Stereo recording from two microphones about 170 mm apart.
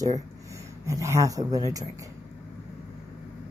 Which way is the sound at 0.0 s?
20° right (ahead or behind).